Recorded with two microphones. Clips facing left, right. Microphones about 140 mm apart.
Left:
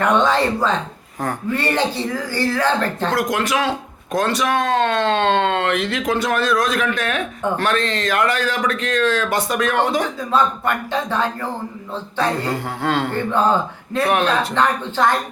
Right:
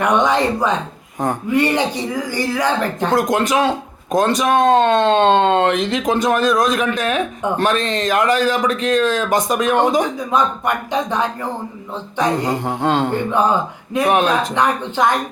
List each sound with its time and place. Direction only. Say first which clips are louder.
0.0 s speech: right 1 dB; 15° right (ahead or behind)